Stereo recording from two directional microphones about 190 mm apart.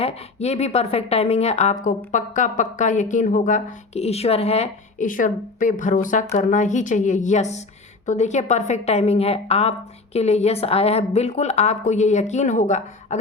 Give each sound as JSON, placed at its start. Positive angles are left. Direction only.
{"t": 0.0, "sound": "speech", "side_deg": 35}